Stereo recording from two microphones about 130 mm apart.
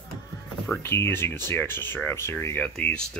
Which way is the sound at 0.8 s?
20° left (ahead or behind).